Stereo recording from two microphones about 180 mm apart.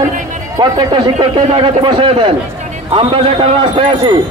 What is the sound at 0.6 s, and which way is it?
A man's voice, 20° right (ahead or behind).